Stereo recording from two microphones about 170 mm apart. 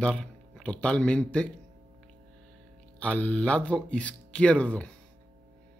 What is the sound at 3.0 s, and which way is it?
Speech, 10° left (ahead or behind).